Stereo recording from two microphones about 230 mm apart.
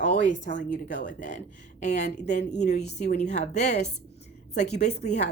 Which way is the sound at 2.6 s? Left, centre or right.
Left.